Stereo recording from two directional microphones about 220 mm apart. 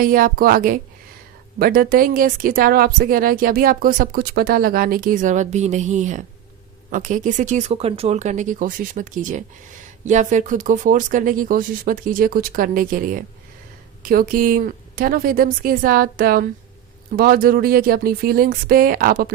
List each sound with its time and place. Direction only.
0.0 s speech: 40° right (ahead or behind)